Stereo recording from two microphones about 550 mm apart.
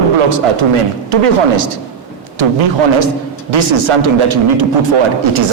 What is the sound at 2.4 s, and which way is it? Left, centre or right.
Speech, right.